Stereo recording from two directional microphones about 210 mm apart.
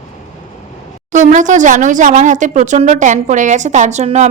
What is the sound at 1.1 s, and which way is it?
Speech, 35° right (ahead or behind).